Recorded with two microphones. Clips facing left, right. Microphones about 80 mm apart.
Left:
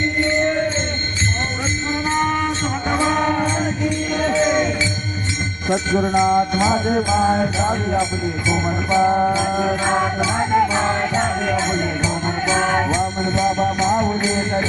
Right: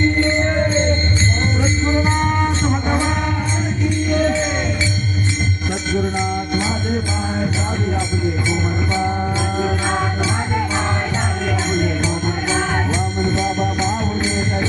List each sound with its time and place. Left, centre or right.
2.0 s music: centre
5.6 s music: left
6.6 s music: left
8.4 s speech: centre
9.0 s music: left
9.3 s speech: centre
13.9 s music: centre